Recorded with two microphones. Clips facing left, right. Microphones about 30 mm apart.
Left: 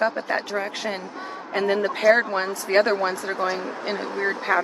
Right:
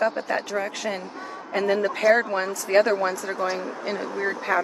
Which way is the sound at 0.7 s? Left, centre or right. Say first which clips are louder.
Even; left.